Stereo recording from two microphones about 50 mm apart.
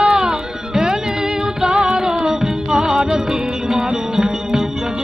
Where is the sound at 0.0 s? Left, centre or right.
Centre.